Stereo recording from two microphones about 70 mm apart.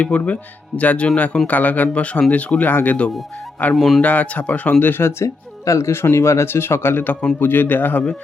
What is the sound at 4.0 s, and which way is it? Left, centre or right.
Speech, left.